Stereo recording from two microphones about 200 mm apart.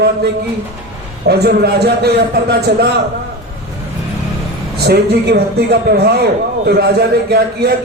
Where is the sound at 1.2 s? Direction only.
55° right (ahead or behind).